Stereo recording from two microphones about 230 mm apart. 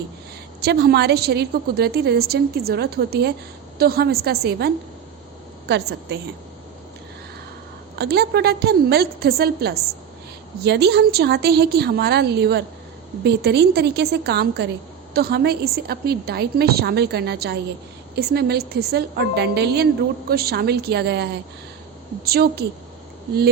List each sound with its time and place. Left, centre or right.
0.6 s a woman's voice: right
7.9 s a woman's voice: right